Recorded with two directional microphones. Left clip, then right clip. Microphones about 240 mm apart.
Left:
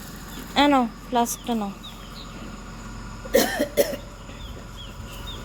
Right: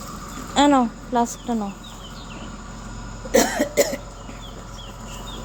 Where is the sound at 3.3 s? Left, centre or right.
Centre.